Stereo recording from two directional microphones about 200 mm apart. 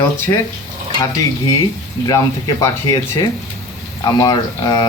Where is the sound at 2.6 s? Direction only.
20° left (ahead or behind).